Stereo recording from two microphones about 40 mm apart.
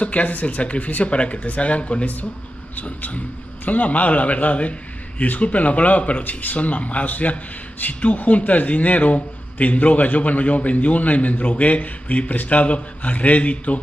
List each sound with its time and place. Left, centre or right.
0.0 s a man's voice: left
2.7 s a man's voice: left